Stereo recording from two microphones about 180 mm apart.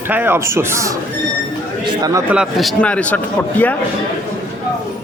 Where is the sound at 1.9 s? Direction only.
20° right (ahead or behind).